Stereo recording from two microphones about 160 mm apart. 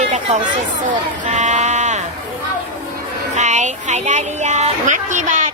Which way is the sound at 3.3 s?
50° right (ahead or behind).